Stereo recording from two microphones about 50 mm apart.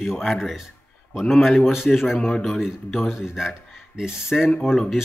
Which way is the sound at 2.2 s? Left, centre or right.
Centre.